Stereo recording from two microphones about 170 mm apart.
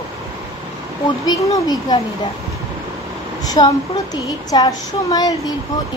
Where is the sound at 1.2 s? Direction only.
25° left (ahead or behind).